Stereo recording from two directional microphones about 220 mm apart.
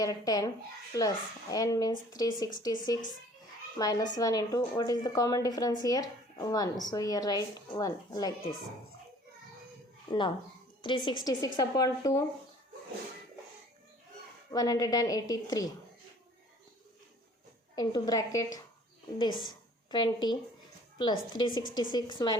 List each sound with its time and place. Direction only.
0.0 s a woman's voice: 15° left (ahead or behind)
3.8 s a woman's voice: 15° left (ahead or behind)
10.1 s a woman's voice: 20° left (ahead or behind)
14.5 s a woman's voice: 15° left (ahead or behind)
17.7 s a woman's voice: 20° left (ahead or behind)